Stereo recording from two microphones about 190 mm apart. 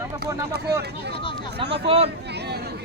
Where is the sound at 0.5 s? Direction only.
60° right (ahead or behind).